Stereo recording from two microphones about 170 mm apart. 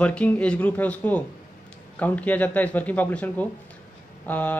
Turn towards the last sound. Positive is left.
turn(degrees=10)  # may be behind; listen again after turning